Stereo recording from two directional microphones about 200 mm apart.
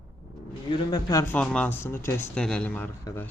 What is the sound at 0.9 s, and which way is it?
Speech, 20° left (ahead or behind).